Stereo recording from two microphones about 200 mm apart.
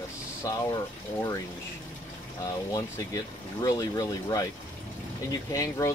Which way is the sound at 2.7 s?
15° left (ahead or behind).